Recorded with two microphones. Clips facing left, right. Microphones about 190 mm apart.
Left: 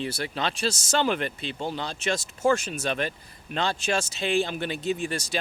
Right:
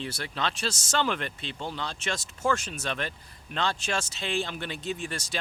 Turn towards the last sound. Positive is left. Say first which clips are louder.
# left 5 dB
turn(degrees=10)  # may be behind; listen again after turning